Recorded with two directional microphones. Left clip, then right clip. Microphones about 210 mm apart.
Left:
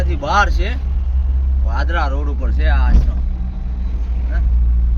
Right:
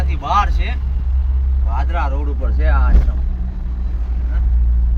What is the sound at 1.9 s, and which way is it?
Speech, 25° left (ahead or behind).